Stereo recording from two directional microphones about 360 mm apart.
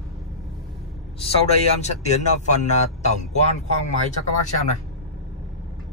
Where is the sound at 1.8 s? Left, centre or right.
Centre.